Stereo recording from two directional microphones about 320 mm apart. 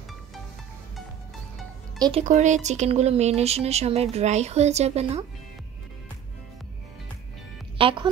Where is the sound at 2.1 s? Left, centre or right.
Right.